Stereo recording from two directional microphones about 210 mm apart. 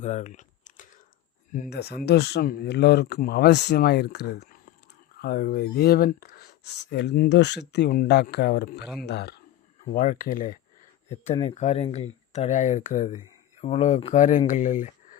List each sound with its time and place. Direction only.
0.0 s typing: 35° left (ahead or behind)
1.5 s speech: 45° left (ahead or behind)
9.8 s speech: 40° left (ahead or behind)